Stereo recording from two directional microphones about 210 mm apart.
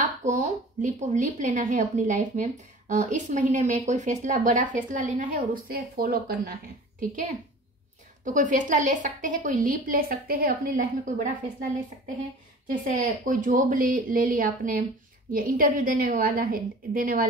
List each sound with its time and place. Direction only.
0.0 s speech: 35° right (ahead or behind)
8.2 s speech: 35° right (ahead or behind)
12.8 s a woman's voice: 40° right (ahead or behind)